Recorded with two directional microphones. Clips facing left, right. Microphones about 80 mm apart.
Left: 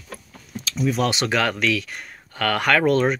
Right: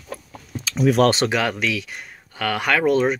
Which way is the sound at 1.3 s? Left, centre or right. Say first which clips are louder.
Left 1 dB; centre.